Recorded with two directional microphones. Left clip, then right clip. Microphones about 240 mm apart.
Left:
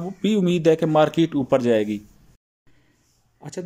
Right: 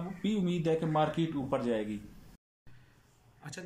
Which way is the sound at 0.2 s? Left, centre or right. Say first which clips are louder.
Left 14 dB; left.